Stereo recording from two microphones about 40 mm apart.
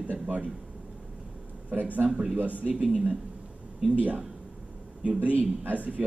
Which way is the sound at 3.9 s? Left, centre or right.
Right.